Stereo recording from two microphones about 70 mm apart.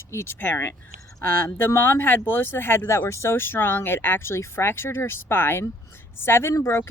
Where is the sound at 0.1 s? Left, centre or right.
Left.